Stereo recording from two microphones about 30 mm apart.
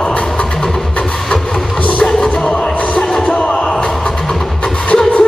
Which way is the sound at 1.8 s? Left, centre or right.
Left.